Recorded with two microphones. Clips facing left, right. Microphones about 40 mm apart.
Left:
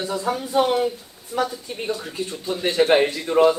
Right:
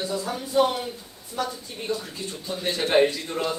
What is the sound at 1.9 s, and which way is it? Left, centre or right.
Speech, left.